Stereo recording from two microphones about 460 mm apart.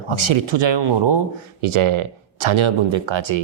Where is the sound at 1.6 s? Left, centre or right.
Right.